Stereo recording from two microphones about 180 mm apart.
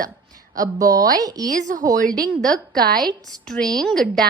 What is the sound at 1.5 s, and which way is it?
Speech, 45° right (ahead or behind).